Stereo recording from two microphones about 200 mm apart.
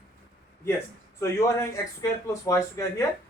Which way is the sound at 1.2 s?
15° left (ahead or behind).